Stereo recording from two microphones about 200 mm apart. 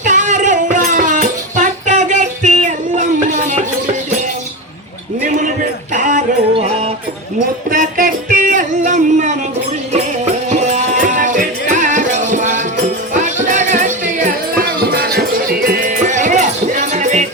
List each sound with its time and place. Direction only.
0.0 s music: 40° right (ahead or behind)
5.9 s music: 40° right (ahead or behind)
10.5 s music: 35° right (ahead or behind)